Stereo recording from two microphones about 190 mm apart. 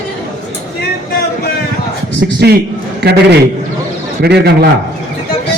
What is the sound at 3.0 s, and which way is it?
A man's voice, 60° right (ahead or behind).